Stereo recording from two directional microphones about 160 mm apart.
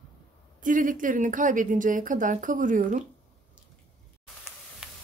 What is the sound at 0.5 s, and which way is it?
A woman's voice, 55° right (ahead or behind).